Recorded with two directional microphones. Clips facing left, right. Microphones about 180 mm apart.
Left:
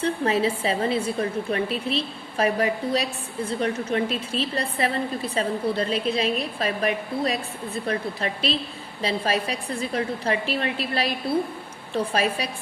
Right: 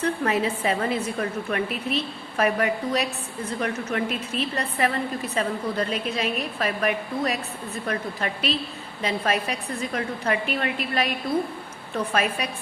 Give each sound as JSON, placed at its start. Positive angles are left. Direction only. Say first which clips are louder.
{"t": 0.0, "sound": "a woman's voice", "louder": "left 1 dB", "side_deg": 30}